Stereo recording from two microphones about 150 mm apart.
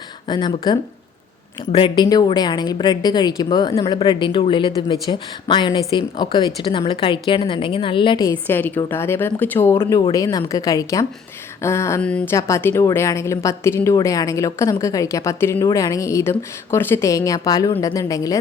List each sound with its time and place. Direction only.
0.3 s a woman's voice: 30° left (ahead or behind)
8.2 s a woman's voice: 15° left (ahead or behind)
12.0 s speech: 5° left (ahead or behind)
12.3 s a woman's voice: 20° left (ahead or behind)